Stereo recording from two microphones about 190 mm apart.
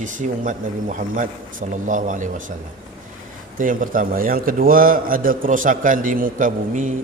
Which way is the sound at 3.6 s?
45° right (ahead or behind).